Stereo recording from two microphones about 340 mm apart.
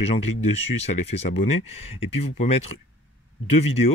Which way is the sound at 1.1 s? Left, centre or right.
Left.